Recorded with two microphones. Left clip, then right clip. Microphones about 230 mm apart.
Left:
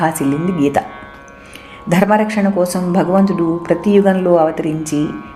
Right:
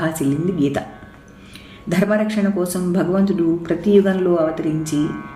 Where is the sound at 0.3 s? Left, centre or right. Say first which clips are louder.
Left 3 dB; left.